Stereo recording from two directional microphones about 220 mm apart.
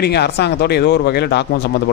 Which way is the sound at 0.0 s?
50° left (ahead or behind).